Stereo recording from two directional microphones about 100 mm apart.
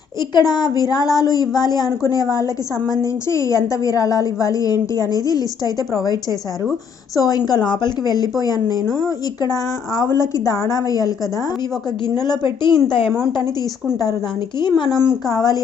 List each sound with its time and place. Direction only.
0.2 s a woman's voice: 45° left (ahead or behind)
7.2 s a woman's voice: 40° left (ahead or behind)
14.6 s a woman's voice: 50° left (ahead or behind)